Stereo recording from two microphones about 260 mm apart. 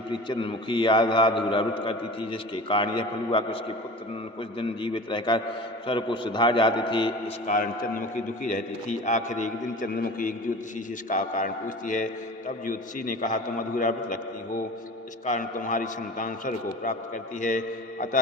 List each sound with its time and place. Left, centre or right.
0.1 s a man's voice: centre
4.6 s a man's voice: centre